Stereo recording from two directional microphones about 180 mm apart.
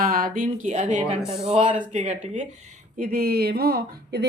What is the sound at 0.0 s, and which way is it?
A woman's voice, 50° right (ahead or behind).